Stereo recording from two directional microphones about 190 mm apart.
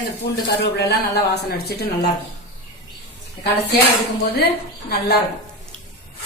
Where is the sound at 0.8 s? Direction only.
60° left (ahead or behind).